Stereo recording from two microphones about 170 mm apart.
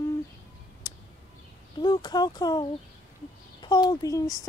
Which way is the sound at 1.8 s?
25° left (ahead or behind).